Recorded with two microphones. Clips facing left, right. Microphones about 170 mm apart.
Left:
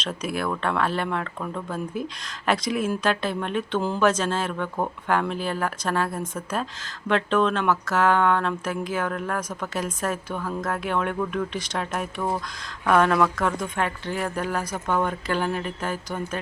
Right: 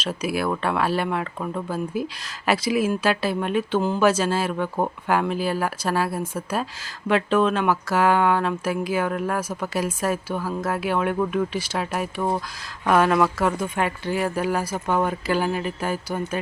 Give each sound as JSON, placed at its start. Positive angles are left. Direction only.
{"t": 0.0, "sound": "speech", "side_deg": -5}